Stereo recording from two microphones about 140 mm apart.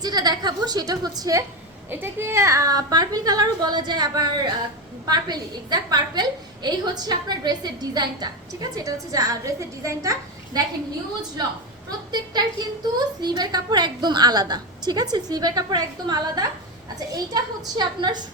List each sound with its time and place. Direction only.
0.0 s a woman's voice: 30° right (ahead or behind)
11.9 s a woman's voice: 30° right (ahead or behind)